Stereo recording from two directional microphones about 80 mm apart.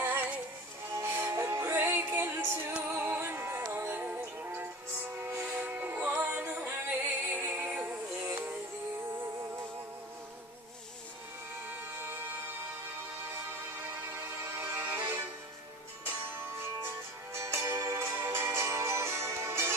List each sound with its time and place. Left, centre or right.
0.9 s music: right
5.5 s music: right
11.7 s music: right
13.8 s music: right
16.3 s music: right